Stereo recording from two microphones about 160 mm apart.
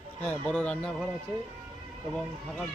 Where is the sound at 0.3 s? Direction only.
10° left (ahead or behind).